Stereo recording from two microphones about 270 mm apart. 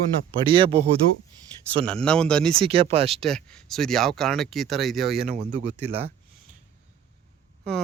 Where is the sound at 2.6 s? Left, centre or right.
Right.